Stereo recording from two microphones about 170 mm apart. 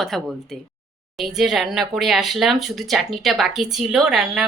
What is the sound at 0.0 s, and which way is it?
Speech, centre (ahead or behind).